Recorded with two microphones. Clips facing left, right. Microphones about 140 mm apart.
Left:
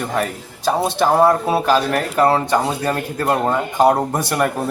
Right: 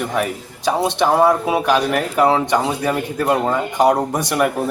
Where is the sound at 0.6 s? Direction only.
10° left (ahead or behind).